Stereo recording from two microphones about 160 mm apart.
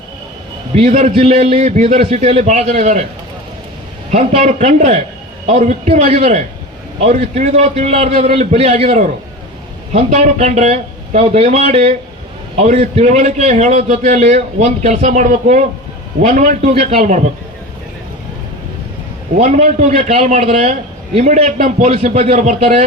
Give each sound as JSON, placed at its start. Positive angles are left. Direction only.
{"t": 0.9, "sound": "a man's voice", "side_deg": -45}
{"t": 4.1, "sound": "a man's voice", "side_deg": -40}
{"t": 19.4, "sound": "a man's voice", "side_deg": -45}